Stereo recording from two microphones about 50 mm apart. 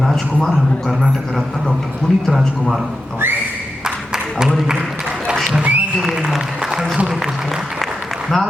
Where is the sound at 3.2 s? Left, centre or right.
Right.